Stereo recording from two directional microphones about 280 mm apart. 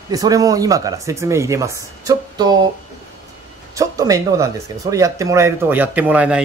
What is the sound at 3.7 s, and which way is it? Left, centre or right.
A man's voice, centre.